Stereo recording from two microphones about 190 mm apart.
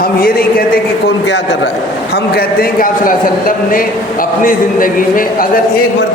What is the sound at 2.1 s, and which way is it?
A man's voice, 55° left (ahead or behind).